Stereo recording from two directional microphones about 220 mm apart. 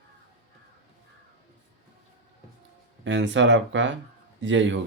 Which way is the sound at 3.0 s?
55° right (ahead or behind).